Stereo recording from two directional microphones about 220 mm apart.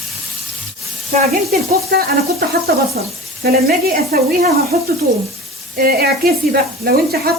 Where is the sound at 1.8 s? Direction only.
45° right (ahead or behind).